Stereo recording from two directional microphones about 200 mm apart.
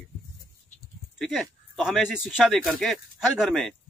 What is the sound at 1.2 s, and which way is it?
A man's voice, centre (ahead or behind).